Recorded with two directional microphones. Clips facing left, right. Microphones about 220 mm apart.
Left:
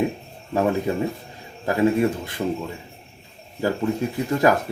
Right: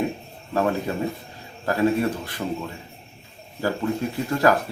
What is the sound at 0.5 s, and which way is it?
Speech, 15° left (ahead or behind).